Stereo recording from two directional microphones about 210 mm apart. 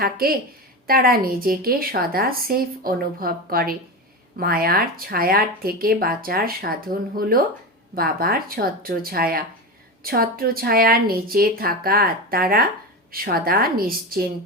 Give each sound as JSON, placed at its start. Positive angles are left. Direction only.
{"t": 0.0, "sound": "a woman's voice", "side_deg": -45}